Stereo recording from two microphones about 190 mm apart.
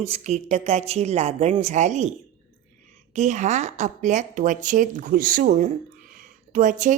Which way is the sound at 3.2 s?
40° right (ahead or behind).